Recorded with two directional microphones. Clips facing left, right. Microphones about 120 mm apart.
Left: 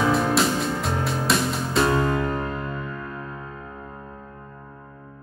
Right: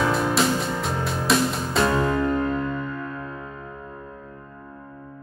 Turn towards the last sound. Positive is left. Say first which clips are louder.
# right 1 dB
turn(degrees=25)  # may be behind; listen again after turning